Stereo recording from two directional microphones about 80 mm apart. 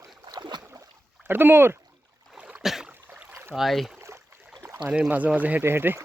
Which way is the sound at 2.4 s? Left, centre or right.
Centre.